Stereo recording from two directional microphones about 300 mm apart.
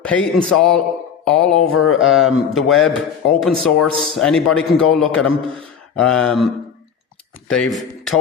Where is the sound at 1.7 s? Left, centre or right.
Left.